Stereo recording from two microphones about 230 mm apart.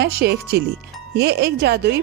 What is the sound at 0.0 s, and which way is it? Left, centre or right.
Speech, right.